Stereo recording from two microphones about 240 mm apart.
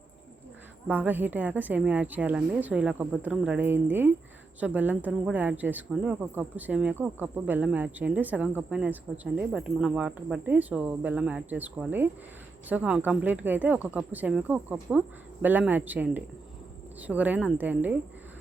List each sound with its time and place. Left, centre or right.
0.9 s speech: centre